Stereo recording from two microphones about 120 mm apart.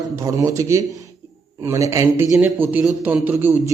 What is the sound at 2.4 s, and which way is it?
Speech, 15° right (ahead or behind).